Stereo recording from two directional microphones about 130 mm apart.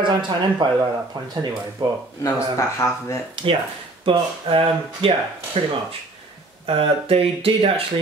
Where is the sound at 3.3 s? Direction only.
45° right (ahead or behind).